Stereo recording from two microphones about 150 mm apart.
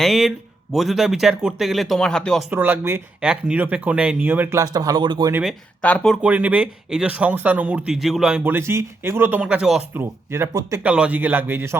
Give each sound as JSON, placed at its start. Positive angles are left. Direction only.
{"t": 0.0, "sound": "speech", "side_deg": 0}
{"t": 2.5, "sound": "speech", "side_deg": -15}
{"t": 5.3, "sound": "speech", "side_deg": -5}
{"t": 5.8, "sound": "speech", "side_deg": 5}
{"t": 6.2, "sound": "speech", "side_deg": -10}
{"t": 9.9, "sound": "speech", "side_deg": -15}
{"t": 10.8, "sound": "speech", "side_deg": -5}